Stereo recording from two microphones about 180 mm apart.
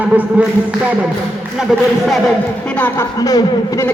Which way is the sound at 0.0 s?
10° right (ahead or behind).